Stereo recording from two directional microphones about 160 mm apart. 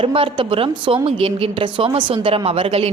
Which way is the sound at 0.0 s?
35° right (ahead or behind).